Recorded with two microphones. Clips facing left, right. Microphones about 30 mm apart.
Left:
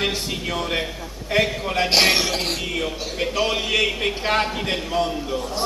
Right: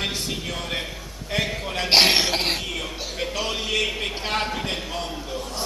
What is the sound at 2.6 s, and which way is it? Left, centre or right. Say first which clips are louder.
Speech: left 4 dB; centre.